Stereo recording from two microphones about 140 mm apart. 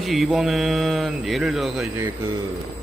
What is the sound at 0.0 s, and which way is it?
Speech, centre (ahead or behind).